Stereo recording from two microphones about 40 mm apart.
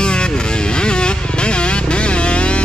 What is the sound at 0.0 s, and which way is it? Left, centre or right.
Vehicle, left.